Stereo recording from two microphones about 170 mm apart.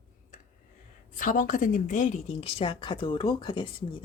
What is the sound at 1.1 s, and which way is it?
Speech, 50° left (ahead or behind).